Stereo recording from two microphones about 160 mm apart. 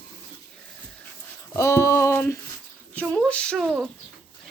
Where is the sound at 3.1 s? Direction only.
5° left (ahead or behind).